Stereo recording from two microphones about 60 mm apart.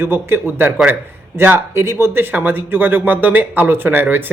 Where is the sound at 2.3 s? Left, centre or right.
Right.